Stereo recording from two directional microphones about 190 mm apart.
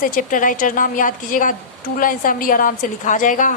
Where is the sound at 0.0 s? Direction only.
45° left (ahead or behind).